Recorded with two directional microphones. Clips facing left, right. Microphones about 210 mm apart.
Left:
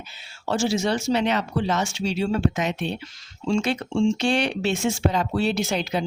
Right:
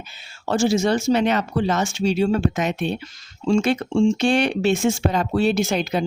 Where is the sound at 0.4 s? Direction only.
50° right (ahead or behind).